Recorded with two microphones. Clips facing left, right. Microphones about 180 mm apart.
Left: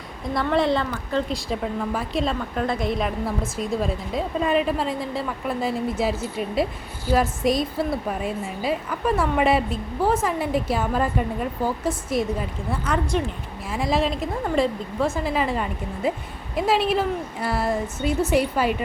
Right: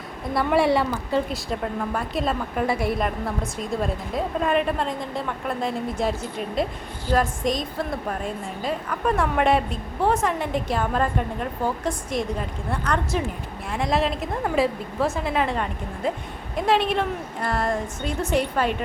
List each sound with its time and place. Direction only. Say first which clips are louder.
0.3 s speech: right 1 dB; 10° right (ahead or behind)
1.5 s a woman's voice: left 1 dB; centre (ahead or behind)